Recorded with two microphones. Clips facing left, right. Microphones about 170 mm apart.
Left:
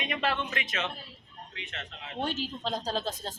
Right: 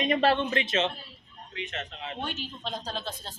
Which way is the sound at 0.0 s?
35° right (ahead or behind).